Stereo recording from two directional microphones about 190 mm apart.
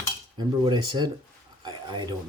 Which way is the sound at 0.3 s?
25° right (ahead or behind).